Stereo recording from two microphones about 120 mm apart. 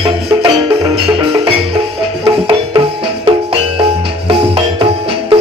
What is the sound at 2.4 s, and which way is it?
Music, 45° right (ahead or behind).